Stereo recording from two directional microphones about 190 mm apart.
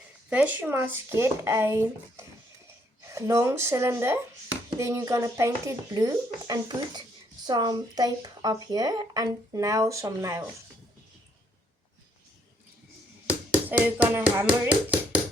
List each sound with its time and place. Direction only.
0.3 s speech: 5° right (ahead or behind)
13.7 s speech: 10° right (ahead or behind)